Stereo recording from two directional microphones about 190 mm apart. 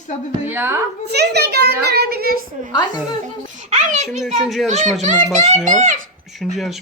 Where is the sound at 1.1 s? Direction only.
60° right (ahead or behind).